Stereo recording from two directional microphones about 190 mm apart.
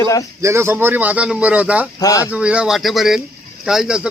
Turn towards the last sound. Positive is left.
turn(degrees=-5)  # may be behind; listen again after turning